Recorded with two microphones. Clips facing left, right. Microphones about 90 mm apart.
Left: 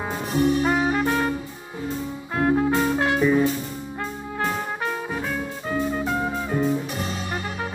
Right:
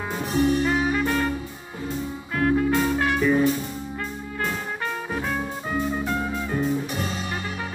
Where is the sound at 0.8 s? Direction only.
15° left (ahead or behind).